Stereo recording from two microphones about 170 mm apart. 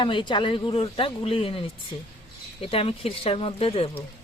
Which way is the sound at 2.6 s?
35° left (ahead or behind).